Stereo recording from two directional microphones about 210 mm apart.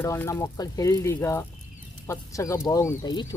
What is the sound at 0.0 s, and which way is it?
Speech, 15° left (ahead or behind).